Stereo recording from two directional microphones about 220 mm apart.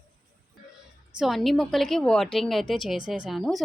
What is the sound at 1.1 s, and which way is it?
A woman's voice, centre (ahead or behind).